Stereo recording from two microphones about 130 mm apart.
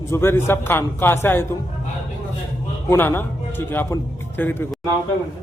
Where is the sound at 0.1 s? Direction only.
20° left (ahead or behind).